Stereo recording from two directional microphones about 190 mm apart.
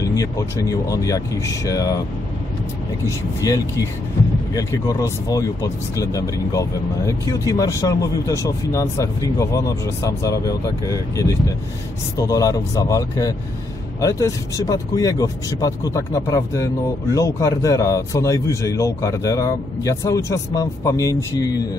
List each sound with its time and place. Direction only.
0.0 s speech: 15° left (ahead or behind)
3.4 s speech: 20° left (ahead or behind)